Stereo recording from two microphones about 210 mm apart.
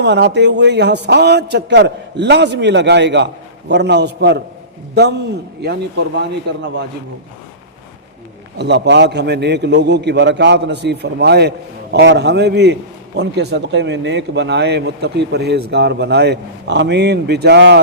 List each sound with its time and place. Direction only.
0.0 s speech: 55° right (ahead or behind)
6.5 s a man's voice: 55° right (ahead or behind)
8.5 s speech: 55° right (ahead or behind)